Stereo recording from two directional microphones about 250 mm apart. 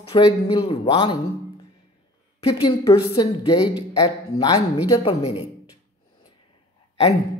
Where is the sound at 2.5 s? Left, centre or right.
Centre.